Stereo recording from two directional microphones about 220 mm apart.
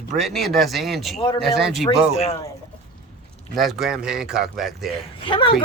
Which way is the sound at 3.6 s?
Centre (ahead or behind).